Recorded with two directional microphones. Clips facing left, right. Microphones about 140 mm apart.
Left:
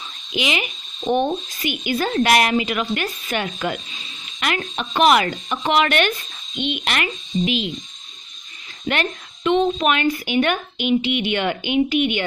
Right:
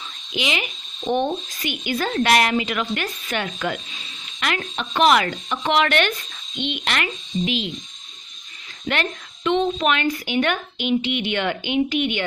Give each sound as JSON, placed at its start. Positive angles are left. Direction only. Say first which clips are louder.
{"t": 0.3, "sound": "a woman's voice", "louder": "left 2 dB", "side_deg": 15}
{"t": 2.0, "sound": "a woman's voice", "louder": "left 2 dB", "side_deg": 20}
{"t": 2.2, "sound": "a woman's voice", "louder": "even", "side_deg": 10}
{"t": 8.8, "sound": "a woman's voice", "louder": "left 2 dB", "side_deg": 15}